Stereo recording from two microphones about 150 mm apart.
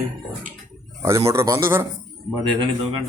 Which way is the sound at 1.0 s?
20° right (ahead or behind).